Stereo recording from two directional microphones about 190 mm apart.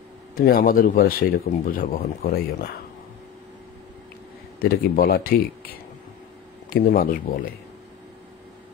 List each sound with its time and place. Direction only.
0.4 s speech: 50° left (ahead or behind)
4.6 s speech: 50° left (ahead or behind)
6.7 s speech: 50° left (ahead or behind)